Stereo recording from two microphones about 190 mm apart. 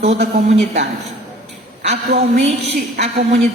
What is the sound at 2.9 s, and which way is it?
Speech, 40° right (ahead or behind).